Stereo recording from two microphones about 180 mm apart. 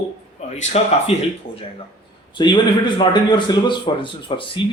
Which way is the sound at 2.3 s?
25° left (ahead or behind).